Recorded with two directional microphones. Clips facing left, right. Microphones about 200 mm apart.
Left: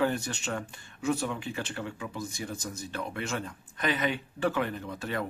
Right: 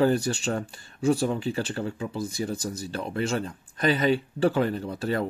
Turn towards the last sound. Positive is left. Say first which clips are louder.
# right 6 dB
turn(degrees=-35)  # may be behind; listen again after turning